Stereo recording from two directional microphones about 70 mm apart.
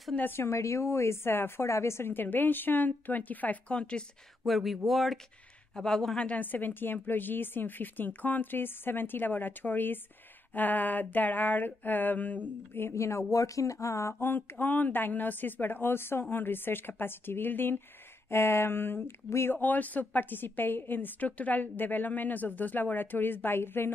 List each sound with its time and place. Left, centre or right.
0.2 s a woman's voice: left; by 4.0 s centre
4.5 s a woman's voice: centre; by 12.4 s left
12.7 s speech: left
14.2 s a woman's voice: left